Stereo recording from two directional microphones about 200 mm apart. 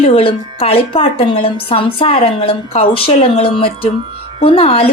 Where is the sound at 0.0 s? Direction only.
30° left (ahead or behind).